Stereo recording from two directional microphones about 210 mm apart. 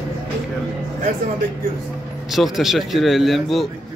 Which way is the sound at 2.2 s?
Centre (ahead or behind).